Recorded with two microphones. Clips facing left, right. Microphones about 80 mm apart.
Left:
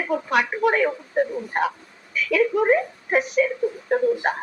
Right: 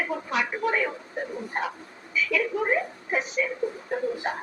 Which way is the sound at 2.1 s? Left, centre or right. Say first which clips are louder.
Left 4 dB; left.